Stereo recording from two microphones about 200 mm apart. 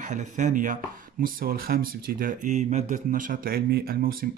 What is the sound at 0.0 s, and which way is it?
Speech, 35° right (ahead or behind).